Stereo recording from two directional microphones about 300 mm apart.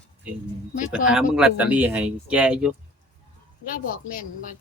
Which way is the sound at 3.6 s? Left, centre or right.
Left.